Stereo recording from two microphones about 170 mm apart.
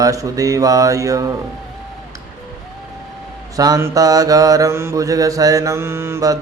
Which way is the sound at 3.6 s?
20° right (ahead or behind).